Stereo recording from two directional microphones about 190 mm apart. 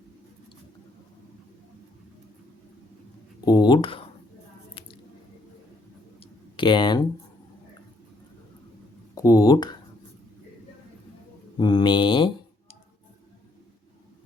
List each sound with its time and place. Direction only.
3.4 s a sound: 20° left (ahead or behind)
6.1 s clicking: 25° left (ahead or behind)
9.1 s speech: 20° left (ahead or behind)
11.5 s speech: 25° left (ahead or behind)